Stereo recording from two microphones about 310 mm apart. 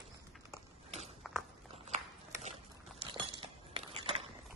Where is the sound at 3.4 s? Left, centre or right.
Centre.